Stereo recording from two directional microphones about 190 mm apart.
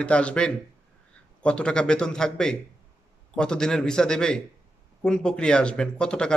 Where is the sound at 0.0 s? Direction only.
5° left (ahead or behind).